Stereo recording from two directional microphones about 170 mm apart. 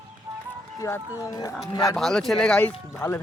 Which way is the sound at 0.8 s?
20° left (ahead or behind).